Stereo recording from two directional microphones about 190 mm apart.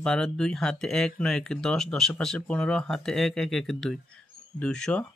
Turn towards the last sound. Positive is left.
turn(degrees=5)  # may be behind; listen again after turning